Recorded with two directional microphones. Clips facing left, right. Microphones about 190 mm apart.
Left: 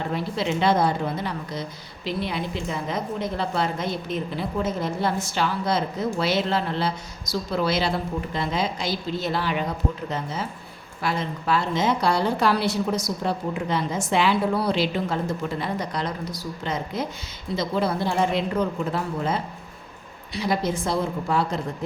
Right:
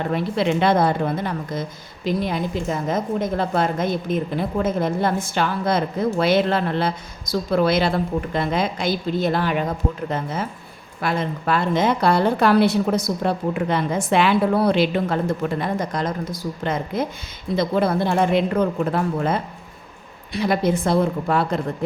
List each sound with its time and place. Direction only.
0.1 s a woman's voice: 60° right (ahead or behind)